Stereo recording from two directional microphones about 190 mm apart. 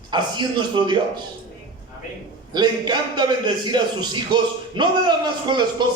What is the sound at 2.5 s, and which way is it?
A man's voice, 20° right (ahead or behind).